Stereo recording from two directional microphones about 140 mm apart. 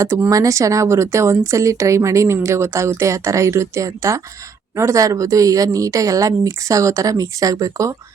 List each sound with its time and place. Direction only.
0.0 s a woman's voice: 20° right (ahead or behind)